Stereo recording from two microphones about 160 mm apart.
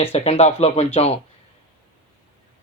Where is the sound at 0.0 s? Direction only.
40° left (ahead or behind).